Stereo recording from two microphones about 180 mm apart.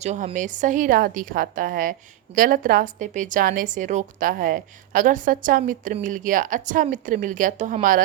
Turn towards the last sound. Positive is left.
turn(degrees=-45)  # may be behind; listen again after turning